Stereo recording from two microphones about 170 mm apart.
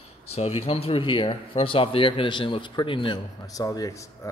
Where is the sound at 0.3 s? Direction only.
40° left (ahead or behind).